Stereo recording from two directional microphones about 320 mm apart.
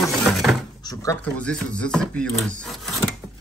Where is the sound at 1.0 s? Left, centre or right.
Centre.